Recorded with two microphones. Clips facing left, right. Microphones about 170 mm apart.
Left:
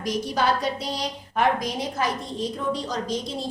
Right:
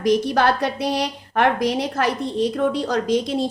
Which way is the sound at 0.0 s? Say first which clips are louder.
Right 7 dB; 65° right (ahead or behind).